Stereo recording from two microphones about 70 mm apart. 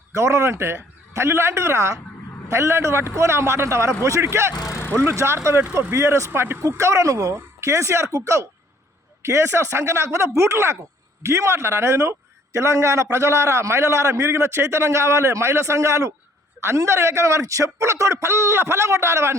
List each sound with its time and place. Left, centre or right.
0.1 s a man's voice: right